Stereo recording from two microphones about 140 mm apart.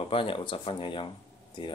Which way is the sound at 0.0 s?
40° left (ahead or behind).